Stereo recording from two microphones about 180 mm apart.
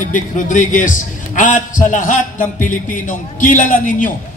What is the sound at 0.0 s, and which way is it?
Speech, 45° left (ahead or behind).